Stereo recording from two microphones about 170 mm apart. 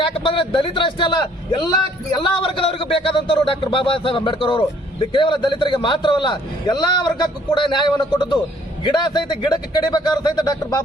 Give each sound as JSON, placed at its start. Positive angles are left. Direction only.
{"t": 0.0, "sound": "a man's voice", "side_deg": 30}